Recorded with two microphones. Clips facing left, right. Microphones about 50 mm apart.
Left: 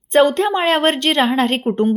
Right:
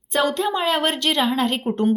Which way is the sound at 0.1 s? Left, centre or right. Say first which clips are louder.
Left 7 dB; left.